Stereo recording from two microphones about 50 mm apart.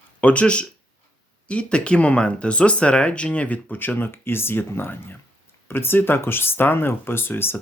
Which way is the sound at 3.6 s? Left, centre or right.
Left.